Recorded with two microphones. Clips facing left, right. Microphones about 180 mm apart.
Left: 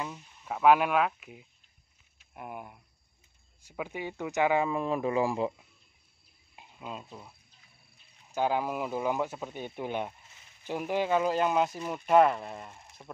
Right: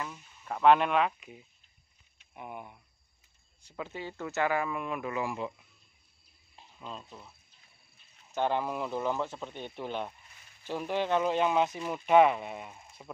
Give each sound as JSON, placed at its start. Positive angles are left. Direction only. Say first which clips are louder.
{"t": 0.0, "sound": "speech", "louder": "left 2 dB", "side_deg": 15}
{"t": 6.5, "sound": "speech", "louder": "left 2 dB", "side_deg": 10}
{"t": 8.4, "sound": "speech", "louder": "left 1 dB", "side_deg": 5}